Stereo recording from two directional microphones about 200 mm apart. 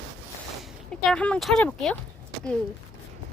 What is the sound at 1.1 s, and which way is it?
Speech, 5° left (ahead or behind).